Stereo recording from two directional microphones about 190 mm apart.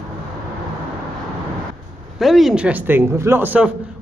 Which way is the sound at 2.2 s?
Centre (ahead or behind).